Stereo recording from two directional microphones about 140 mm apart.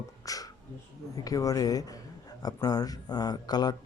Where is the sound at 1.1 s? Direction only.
25° left (ahead or behind).